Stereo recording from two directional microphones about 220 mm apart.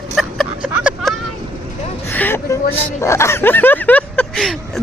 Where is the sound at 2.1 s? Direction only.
10° left (ahead or behind).